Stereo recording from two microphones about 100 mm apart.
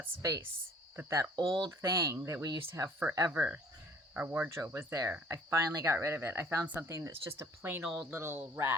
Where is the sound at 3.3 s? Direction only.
20° right (ahead or behind).